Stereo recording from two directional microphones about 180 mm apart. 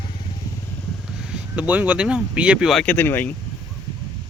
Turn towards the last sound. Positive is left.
turn(degrees=10)  # may be behind; listen again after turning